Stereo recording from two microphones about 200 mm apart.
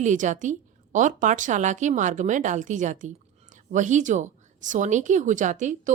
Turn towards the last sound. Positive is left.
turn(degrees=-40)  # may be behind; listen again after turning